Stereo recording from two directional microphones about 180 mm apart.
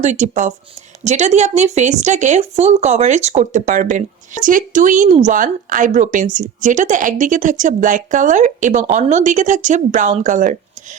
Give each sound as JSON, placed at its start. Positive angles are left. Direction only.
{"t": 0.0, "sound": "a woman's voice", "side_deg": -40}